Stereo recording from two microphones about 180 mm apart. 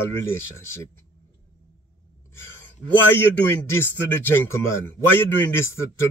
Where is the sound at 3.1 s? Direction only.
15° left (ahead or behind).